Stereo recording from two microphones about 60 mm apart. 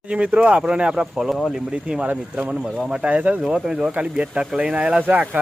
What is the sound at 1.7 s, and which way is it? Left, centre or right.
Speech, centre.